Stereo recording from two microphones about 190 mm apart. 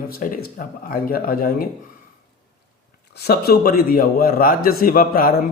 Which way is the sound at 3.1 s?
55° left (ahead or behind).